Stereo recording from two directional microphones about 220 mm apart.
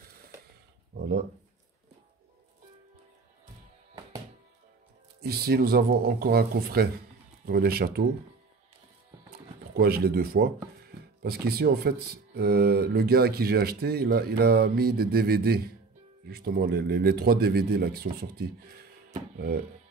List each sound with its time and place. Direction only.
0.9 s speech: 45° right (ahead or behind)
5.2 s speech: 45° right (ahead or behind)
9.8 s speech: 45° right (ahead or behind)